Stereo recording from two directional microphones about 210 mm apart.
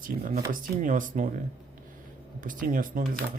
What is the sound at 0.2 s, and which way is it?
Speech, 40° right (ahead or behind).